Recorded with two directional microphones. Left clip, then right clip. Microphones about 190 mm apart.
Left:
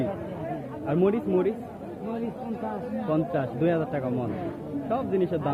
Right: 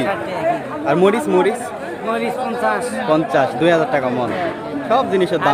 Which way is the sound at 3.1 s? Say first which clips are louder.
Right 12 dB; 20° right (ahead or behind).